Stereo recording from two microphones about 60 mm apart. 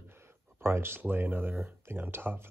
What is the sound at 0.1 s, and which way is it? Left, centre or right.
Speech, right.